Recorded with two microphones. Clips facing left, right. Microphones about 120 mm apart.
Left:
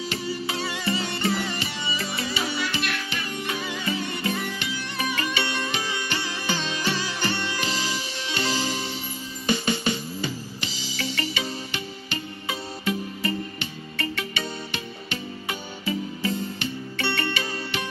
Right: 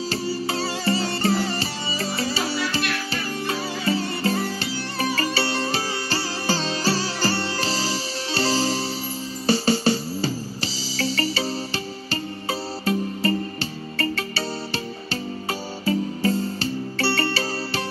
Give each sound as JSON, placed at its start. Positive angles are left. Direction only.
{"t": 0.1, "sound": "music", "side_deg": -35}